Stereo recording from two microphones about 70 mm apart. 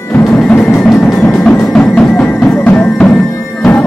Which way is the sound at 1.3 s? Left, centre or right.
Centre.